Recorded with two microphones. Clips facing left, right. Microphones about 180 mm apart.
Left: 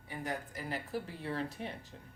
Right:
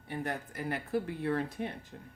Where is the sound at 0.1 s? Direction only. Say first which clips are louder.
Right 3 dB; 60° right (ahead or behind).